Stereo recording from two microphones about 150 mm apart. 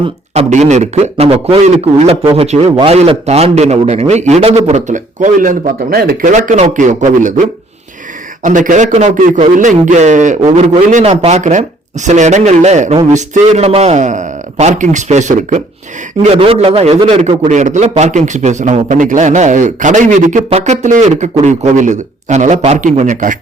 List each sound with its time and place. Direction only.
0.0 s a man's voice: 45° right (ahead or behind); by 6.3 s 85° right
6.3 s a man's voice: 50° right (ahead or behind)
8.4 s a man's voice: 55° right (ahead or behind)
16.2 s a man's voice: 40° right (ahead or behind); by 23.4 s 60° right (ahead or behind)